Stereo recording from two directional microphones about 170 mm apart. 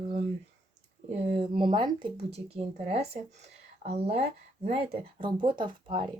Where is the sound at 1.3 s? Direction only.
30° right (ahead or behind).